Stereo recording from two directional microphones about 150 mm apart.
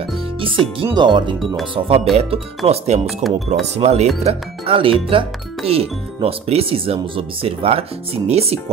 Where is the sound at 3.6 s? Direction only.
45° right (ahead or behind).